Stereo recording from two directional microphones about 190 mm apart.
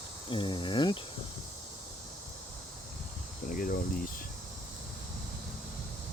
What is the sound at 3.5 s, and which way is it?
Cricket, 50° left (ahead or behind).